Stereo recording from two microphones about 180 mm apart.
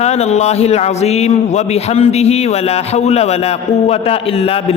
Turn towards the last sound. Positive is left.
turn(degrees=30)  # may be behind; listen again after turning